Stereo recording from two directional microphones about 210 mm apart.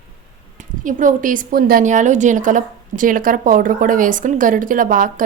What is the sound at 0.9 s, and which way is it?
A woman's voice, 40° right (ahead or behind).